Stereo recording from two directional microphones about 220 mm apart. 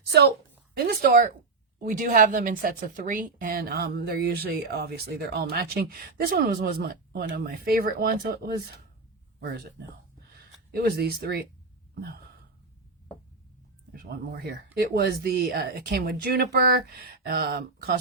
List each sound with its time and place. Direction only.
0.9 s speech: 40° right (ahead or behind)
13.9 s speech: 45° right (ahead or behind)